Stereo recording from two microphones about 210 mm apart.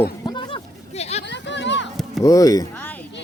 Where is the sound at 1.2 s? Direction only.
55° left (ahead or behind).